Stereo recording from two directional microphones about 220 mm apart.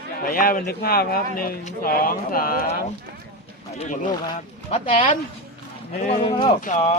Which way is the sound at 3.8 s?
35° left (ahead or behind).